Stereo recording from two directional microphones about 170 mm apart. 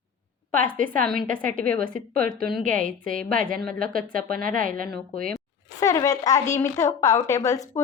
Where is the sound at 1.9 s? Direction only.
55° right (ahead or behind).